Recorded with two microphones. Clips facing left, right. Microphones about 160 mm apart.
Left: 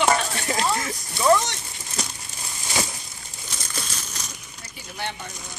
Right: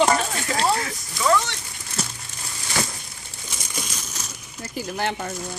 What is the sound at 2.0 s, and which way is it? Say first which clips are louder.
Crumpling: right 1 dB; 5° right (ahead or behind).